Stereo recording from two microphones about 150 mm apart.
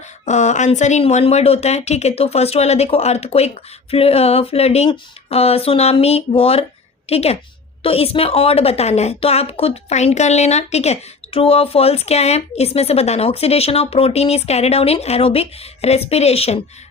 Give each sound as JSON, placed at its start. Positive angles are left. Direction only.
{"t": 0.0, "sound": "a woman's voice", "side_deg": 50}